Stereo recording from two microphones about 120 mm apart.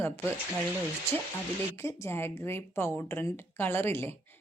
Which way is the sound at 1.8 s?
20° left (ahead or behind).